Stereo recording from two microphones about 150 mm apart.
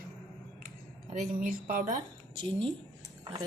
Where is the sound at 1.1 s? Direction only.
60° right (ahead or behind).